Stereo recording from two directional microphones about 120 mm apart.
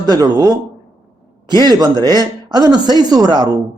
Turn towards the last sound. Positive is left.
turn(degrees=-35)  # may be behind; listen again after turning